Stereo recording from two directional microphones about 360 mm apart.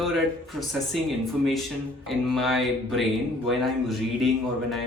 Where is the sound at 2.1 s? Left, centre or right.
Centre.